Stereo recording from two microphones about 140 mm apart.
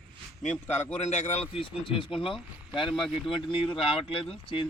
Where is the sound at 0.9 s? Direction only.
55° left (ahead or behind).